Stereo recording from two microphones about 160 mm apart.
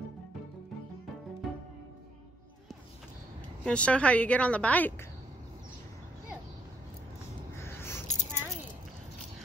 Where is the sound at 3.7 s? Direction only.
5° left (ahead or behind).